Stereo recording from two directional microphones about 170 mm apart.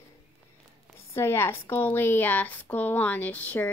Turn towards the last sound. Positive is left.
turn(degrees=10)  # may be behind; listen again after turning